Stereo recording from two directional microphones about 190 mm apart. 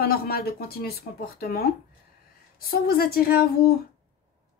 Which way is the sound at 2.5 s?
50° left (ahead or behind).